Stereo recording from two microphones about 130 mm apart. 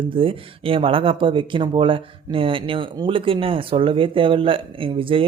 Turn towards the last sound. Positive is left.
turn(degrees=-45)  # may be behind; listen again after turning